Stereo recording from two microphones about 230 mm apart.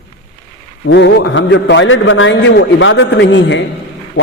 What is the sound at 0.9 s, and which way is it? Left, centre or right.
A man's voice, left.